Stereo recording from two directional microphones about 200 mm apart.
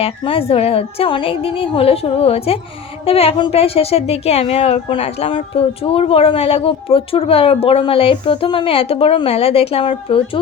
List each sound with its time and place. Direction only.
0.0 s a woman's voice: 30° left (ahead or behind)